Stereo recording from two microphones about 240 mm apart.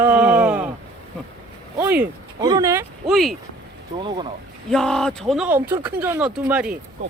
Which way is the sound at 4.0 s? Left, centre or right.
Centre.